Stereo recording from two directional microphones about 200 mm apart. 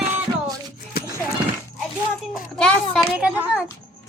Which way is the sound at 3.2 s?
5° right (ahead or behind).